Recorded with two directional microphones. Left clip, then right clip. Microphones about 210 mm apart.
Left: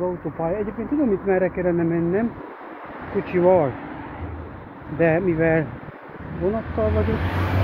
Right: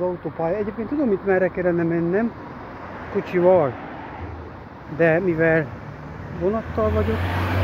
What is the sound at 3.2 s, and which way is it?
Speech, 15° right (ahead or behind).